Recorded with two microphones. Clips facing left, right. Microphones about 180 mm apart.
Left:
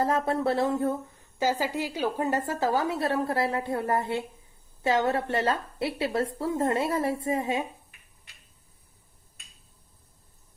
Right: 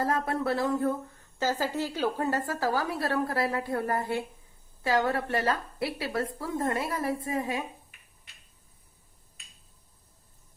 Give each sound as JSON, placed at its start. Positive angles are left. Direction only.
{"t": 0.0, "sound": "a woman's voice", "side_deg": 25}
{"t": 1.4, "sound": "a woman's voice", "side_deg": 15}